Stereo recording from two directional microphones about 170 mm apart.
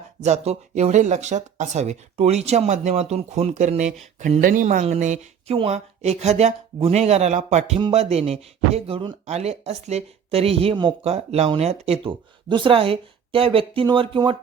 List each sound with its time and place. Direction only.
0.2 s speech: 40° right (ahead or behind)
4.4 s speech: 55° right (ahead or behind); by 14.3 s 30° right (ahead or behind)